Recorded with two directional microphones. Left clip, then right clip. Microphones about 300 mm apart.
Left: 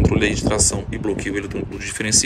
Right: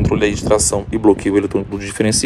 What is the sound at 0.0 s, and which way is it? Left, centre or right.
Speech, centre.